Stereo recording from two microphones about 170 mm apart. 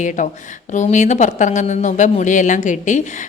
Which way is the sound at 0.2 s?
45° left (ahead or behind).